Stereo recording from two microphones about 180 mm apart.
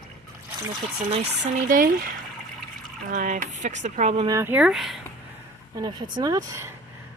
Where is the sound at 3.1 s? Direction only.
45° right (ahead or behind).